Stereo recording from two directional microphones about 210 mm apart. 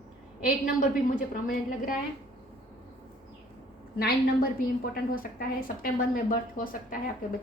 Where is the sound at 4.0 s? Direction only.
45° left (ahead or behind).